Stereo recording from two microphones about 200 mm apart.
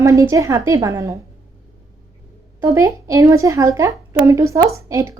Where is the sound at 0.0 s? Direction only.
15° right (ahead or behind).